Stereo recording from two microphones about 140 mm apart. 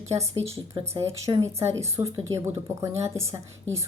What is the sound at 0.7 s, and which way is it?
Speech, 25° right (ahead or behind).